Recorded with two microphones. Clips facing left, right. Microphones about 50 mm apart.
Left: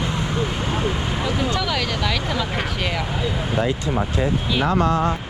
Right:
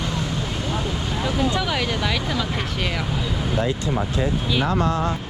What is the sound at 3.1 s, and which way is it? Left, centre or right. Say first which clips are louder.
Vehicle: left 1 dB; centre.